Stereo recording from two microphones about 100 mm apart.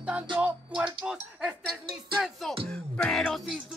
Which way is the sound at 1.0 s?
10° right (ahead or behind).